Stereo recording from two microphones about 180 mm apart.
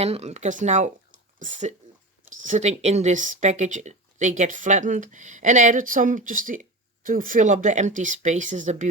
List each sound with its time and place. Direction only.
0.0 s speech: 35° right (ahead or behind)